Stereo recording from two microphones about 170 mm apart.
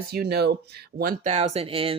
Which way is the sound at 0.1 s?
70° right (ahead or behind).